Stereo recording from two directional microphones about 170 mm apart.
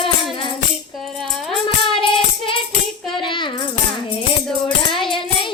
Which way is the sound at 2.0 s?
30° left (ahead or behind).